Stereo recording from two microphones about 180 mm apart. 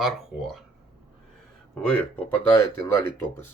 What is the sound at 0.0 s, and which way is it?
Speech, centre (ahead or behind).